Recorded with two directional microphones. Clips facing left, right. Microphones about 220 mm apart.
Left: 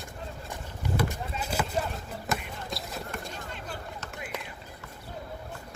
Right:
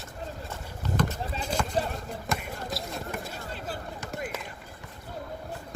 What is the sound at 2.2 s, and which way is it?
Basketball bounce, centre (ahead or behind).